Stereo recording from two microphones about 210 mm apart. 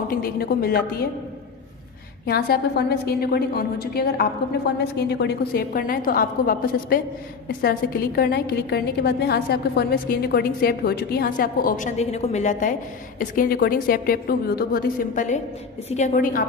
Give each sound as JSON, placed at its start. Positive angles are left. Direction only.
{"t": 0.1, "sound": "a woman's voice", "side_deg": 45}
{"t": 2.2, "sound": "a woman's voice", "side_deg": 50}
{"t": 8.2, "sound": "a woman's voice", "side_deg": 50}